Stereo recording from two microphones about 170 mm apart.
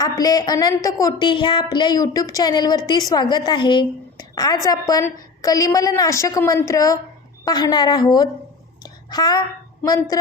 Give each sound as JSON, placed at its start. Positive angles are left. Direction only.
{"t": 0.0, "sound": "a woman's voice", "side_deg": 20}
{"t": 8.8, "sound": "a sound", "side_deg": 25}
{"t": 9.8, "sound": "a woman's voice", "side_deg": 20}